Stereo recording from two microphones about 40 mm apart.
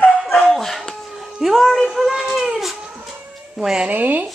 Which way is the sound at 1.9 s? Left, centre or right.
Centre.